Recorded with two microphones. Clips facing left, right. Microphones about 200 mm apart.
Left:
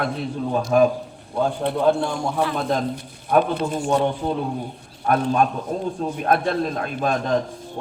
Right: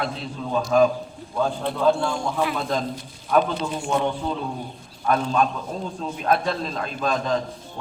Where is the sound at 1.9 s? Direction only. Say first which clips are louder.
Even; 55° left (ahead or behind).